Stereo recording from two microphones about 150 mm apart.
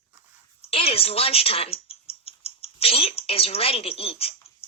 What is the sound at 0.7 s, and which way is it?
Speech, 40° left (ahead or behind).